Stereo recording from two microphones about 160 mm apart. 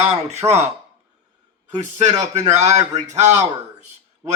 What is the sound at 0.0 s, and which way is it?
Speech, 45° right (ahead or behind).